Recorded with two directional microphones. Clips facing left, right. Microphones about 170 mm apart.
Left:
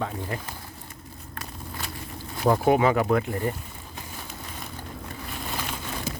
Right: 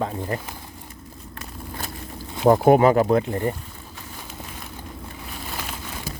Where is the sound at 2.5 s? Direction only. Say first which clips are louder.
Right 5 dB; 45° right (ahead or behind).